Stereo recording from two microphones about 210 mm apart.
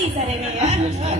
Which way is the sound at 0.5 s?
30° right (ahead or behind).